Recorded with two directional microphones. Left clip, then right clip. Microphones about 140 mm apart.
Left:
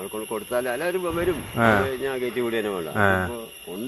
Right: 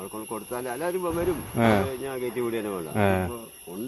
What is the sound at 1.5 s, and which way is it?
Speech, 50° right (ahead or behind).